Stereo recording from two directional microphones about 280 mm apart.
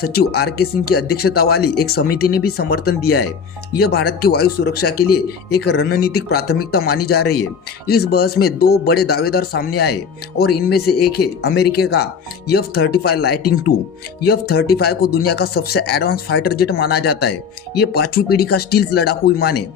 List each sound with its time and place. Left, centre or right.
0.0 s speech: left